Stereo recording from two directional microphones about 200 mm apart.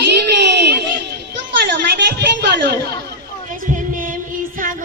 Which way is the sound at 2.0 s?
55° right (ahead or behind).